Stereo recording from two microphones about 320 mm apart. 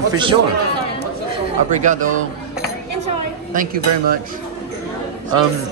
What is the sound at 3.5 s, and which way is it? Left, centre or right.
Speech, right.